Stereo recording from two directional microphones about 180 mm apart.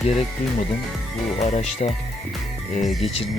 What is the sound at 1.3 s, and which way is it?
Speech, 40° left (ahead or behind).